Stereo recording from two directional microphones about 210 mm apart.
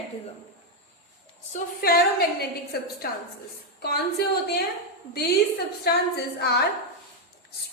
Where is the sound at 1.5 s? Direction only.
45° left (ahead or behind).